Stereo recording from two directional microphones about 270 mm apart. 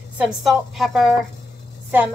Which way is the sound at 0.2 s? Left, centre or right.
Centre.